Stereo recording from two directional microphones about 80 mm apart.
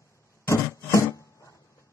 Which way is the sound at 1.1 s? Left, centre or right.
Left.